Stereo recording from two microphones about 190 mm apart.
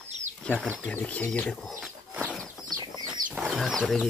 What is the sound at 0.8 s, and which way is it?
Speech, 10° left (ahead or behind).